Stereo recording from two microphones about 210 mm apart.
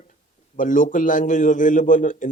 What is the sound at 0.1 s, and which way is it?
A man's voice, 40° left (ahead or behind).